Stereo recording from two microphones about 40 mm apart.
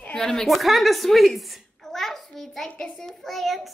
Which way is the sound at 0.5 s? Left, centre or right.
Centre.